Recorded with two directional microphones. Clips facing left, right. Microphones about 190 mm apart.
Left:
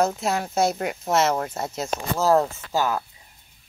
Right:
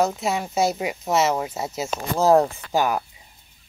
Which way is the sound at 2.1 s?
15° right (ahead or behind).